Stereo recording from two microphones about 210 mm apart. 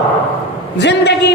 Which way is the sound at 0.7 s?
55° left (ahead or behind).